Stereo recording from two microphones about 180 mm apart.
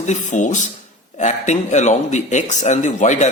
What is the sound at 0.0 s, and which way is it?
A man's voice, 40° left (ahead or behind).